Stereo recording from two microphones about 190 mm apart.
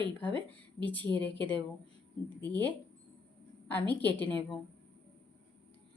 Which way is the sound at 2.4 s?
10° left (ahead or behind).